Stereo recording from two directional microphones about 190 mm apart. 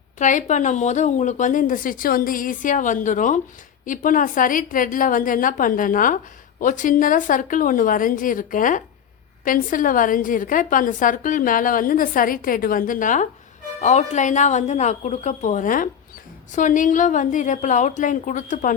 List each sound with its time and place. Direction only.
0.2 s a woman's voice: 40° left (ahead or behind)